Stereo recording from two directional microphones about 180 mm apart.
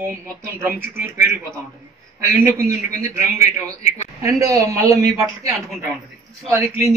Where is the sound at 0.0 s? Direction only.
15° right (ahead or behind).